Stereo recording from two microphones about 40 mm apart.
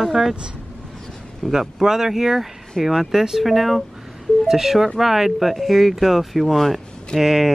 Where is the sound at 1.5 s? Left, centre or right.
Centre.